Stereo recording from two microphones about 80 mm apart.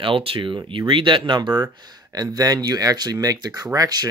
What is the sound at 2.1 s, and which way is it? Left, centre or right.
Speech, right.